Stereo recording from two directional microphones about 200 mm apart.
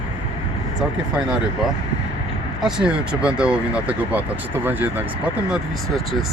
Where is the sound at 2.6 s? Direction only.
5° right (ahead or behind).